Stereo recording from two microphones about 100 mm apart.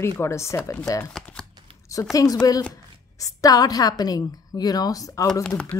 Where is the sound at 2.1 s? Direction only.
35° left (ahead or behind).